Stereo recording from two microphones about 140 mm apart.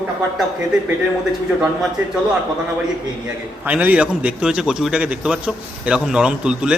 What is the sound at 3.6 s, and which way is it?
A man's voice, 10° right (ahead or behind).